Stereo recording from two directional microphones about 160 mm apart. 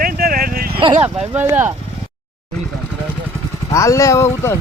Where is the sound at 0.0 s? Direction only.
65° right (ahead or behind).